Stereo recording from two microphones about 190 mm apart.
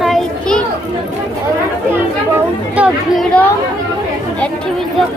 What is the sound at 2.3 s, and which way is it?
Speech, 5° right (ahead or behind).